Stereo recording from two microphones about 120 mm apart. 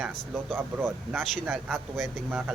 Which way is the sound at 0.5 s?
15° right (ahead or behind).